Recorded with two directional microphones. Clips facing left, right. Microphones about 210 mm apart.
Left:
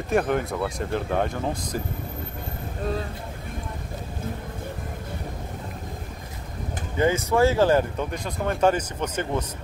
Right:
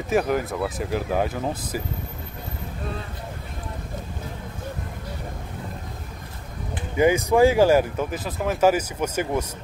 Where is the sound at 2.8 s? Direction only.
40° left (ahead or behind).